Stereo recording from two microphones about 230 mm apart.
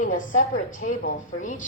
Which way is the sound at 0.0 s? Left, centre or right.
Left.